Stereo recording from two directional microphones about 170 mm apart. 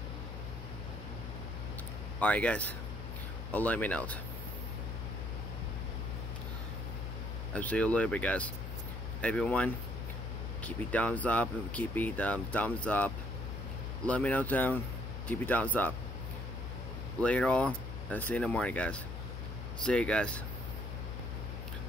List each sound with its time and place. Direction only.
2.1 s speech: 10° left (ahead or behind)
7.5 s speech: 10° left (ahead or behind)
17.2 s speech: 5° left (ahead or behind)